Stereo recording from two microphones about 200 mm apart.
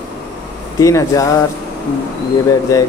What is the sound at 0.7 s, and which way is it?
Speech, 15° left (ahead or behind).